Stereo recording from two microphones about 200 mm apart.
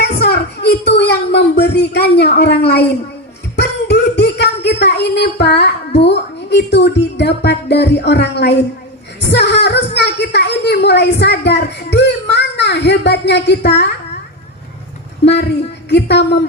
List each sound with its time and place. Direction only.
0.0 s speech: 55° left (ahead or behind)
3.5 s a sound: 60° left (ahead or behind)
6.0 s a woman's voice: 60° left (ahead or behind)
15.2 s a woman's voice: 60° left (ahead or behind)